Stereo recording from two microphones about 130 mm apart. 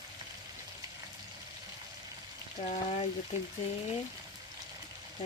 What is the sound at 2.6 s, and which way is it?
Speech, 60° left (ahead or behind).